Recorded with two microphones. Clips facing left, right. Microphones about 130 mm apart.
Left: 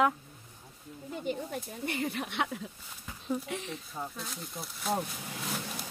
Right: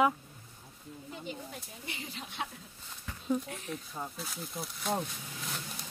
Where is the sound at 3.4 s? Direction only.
90° left.